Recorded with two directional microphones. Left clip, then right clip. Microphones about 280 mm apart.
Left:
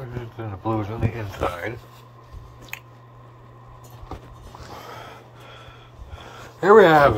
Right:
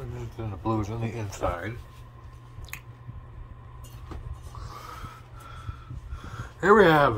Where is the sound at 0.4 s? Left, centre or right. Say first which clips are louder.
Left 3 dB; right.